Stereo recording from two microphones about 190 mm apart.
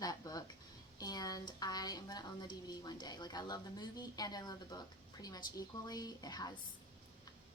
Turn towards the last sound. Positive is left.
turn(degrees=20)  # may be behind; listen again after turning